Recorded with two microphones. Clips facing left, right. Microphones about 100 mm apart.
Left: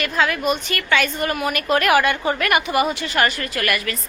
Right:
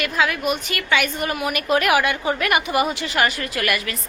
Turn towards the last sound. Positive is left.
turn(degrees=-15)  # may be behind; listen again after turning